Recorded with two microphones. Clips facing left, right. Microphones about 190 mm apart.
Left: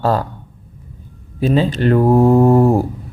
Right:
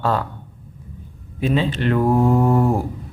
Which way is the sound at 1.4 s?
40° left (ahead or behind).